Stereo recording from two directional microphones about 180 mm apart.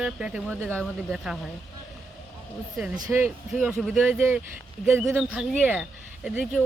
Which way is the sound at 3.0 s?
15° right (ahead or behind).